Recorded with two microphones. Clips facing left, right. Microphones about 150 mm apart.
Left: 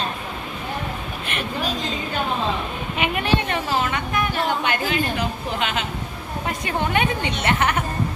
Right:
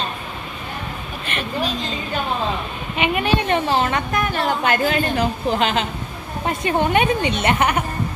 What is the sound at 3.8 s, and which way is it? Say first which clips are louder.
A woman's voice: right 3 dB; 40° right (ahead or behind).